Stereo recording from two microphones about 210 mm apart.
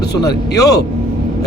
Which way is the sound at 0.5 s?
15° left (ahead or behind).